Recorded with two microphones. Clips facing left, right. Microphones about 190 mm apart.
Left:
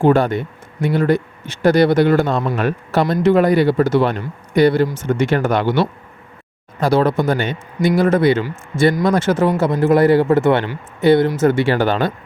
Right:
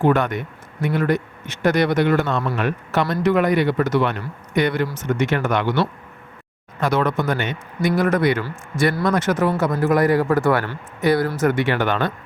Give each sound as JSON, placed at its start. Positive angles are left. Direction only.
{"t": 0.0, "sound": "a man's voice", "side_deg": 30}